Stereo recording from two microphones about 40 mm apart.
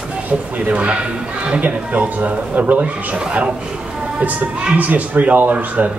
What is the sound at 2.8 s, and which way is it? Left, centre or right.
Speech, right.